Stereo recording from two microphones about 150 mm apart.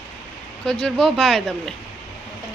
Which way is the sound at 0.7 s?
5° left (ahead or behind).